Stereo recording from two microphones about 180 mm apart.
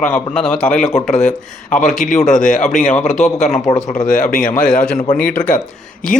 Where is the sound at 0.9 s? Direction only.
35° left (ahead or behind).